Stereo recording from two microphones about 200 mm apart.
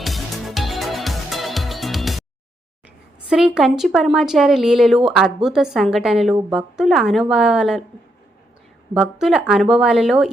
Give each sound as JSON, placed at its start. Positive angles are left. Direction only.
{"t": 0.0, "sound": "music", "side_deg": 0}
{"t": 3.2, "sound": "speech", "side_deg": -5}
{"t": 8.9, "sound": "speech", "side_deg": -5}